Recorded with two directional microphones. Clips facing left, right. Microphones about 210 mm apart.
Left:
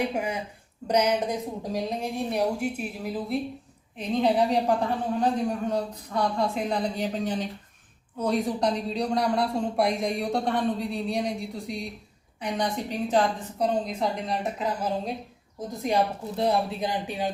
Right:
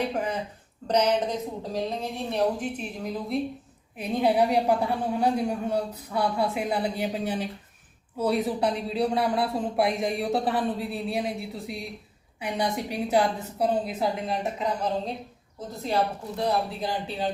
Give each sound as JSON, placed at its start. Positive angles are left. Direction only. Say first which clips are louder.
{"t": 0.0, "sound": "speech", "louder": "even", "side_deg": 10}
{"t": 3.9, "sound": "a woman's voice", "louder": "even", "side_deg": -10}
{"t": 15.9, "sound": "speech", "louder": "left 1 dB", "side_deg": 15}